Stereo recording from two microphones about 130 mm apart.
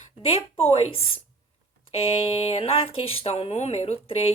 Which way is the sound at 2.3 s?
50° left (ahead or behind).